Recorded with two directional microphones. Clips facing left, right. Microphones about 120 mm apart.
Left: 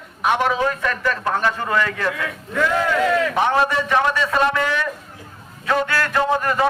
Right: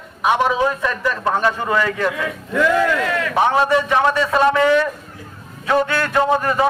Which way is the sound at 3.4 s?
20° right (ahead or behind).